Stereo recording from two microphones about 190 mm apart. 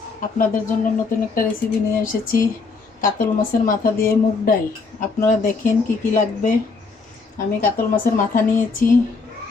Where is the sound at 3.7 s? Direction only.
45° left (ahead or behind).